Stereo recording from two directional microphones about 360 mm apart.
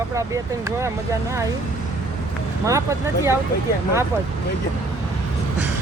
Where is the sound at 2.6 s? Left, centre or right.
Centre.